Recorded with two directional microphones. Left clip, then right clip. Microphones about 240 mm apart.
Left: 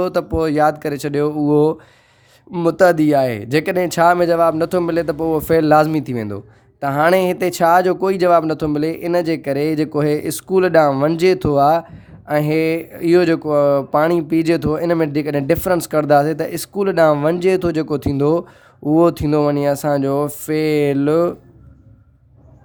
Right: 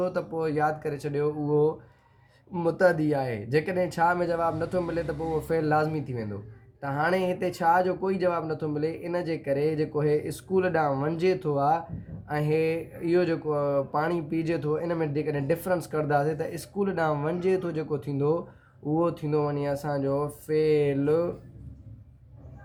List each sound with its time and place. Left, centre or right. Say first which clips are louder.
0.0 s speech: left 10 dB; left